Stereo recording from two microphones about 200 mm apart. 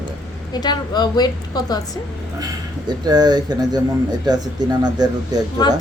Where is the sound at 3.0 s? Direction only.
20° right (ahead or behind).